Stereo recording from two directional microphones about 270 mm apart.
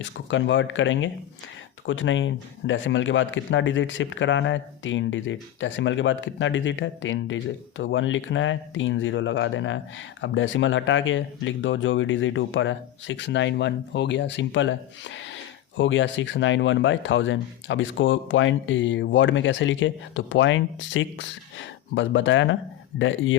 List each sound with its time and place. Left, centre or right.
0.0 s speech: left